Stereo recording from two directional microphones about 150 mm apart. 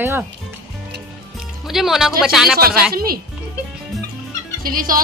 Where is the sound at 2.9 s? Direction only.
80° right.